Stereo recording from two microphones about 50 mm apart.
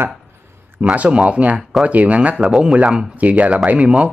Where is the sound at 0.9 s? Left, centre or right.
Right.